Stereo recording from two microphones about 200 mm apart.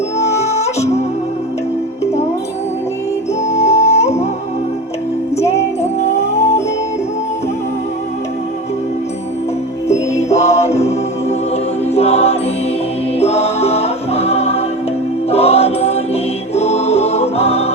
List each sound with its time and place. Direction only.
0.2 s music: 35° left (ahead or behind)
3.4 s music: 35° left (ahead or behind)
9.9 s music: 35° left (ahead or behind)